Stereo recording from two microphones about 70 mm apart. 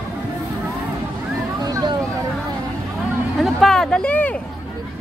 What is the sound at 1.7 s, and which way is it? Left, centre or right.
Vehicle, right.